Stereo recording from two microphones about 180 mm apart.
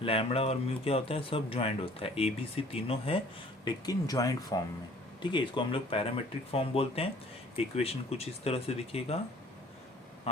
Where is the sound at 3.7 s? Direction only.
20° left (ahead or behind).